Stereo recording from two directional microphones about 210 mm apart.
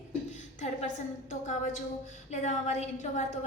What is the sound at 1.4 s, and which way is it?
A woman's voice, 35° left (ahead or behind).